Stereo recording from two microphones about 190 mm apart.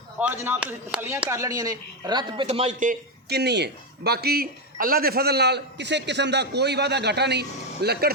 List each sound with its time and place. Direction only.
0.2 s speech: 10° right (ahead or behind); by 8.1 s 60° right (ahead or behind)